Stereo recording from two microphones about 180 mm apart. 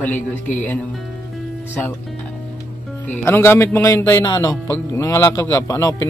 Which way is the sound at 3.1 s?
10° left (ahead or behind).